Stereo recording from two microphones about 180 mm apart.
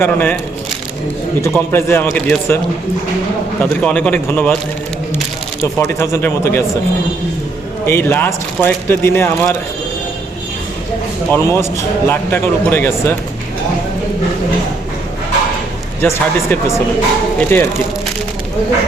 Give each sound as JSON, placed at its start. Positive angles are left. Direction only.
{"t": 0.0, "sound": "speech", "side_deg": 10}
{"t": 1.4, "sound": "speech", "side_deg": 15}
{"t": 3.6, "sound": "speech", "side_deg": 5}
{"t": 5.6, "sound": "speech", "side_deg": 15}
{"t": 7.9, "sound": "speech", "side_deg": 10}
{"t": 11.3, "sound": "speech", "side_deg": 15}
{"t": 16.0, "sound": "speech", "side_deg": 15}